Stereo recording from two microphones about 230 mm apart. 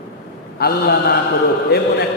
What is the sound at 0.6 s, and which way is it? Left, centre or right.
A man's voice, left.